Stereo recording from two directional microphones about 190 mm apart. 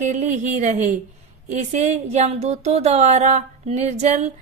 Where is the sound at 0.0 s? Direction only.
40° right (ahead or behind).